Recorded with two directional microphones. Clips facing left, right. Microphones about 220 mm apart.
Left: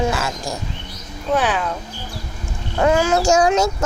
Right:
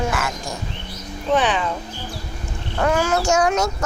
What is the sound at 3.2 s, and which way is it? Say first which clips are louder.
Child singing: left 3 dB; 30° left (ahead or behind).